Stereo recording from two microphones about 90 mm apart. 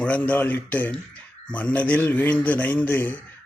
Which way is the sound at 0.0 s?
15° left (ahead or behind).